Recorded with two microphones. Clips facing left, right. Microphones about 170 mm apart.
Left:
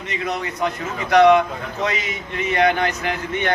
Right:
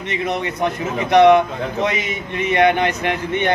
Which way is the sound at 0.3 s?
20° right (ahead or behind).